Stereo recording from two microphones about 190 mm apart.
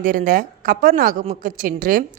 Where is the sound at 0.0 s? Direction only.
45° right (ahead or behind).